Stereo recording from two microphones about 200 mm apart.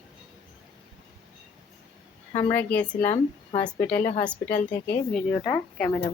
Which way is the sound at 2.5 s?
5° left (ahead or behind).